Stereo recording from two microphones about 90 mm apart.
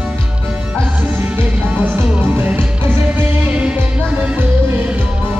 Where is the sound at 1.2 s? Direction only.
20° right (ahead or behind).